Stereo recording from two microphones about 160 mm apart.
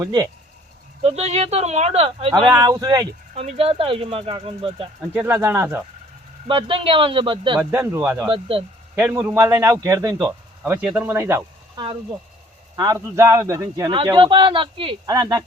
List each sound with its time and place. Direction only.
0.0 s speech: 25° right (ahead or behind)
1.0 s speech: 40° right (ahead or behind)
2.6 s speech: 25° right (ahead or behind)
3.3 s speech: 40° right (ahead or behind)
5.1 s speech: 15° right (ahead or behind)
6.5 s speech: 35° right (ahead or behind)
7.6 s speech: 15° right (ahead or behind)
8.3 s speech: 35° right (ahead or behind)
9.0 s speech: 10° right (ahead or behind)
10.2 s speech: 10° right (ahead or behind)
12.7 s speech: 25° right (ahead or behind)